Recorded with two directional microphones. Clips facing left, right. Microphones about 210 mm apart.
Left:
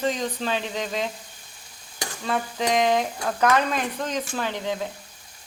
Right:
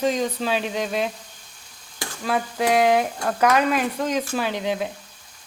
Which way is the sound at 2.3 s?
10° right (ahead or behind).